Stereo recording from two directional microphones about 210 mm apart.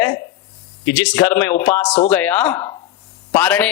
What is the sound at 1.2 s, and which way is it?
Speech, 10° left (ahead or behind).